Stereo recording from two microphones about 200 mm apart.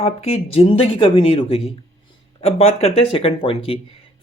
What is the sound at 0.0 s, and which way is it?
Speech, 30° left (ahead or behind).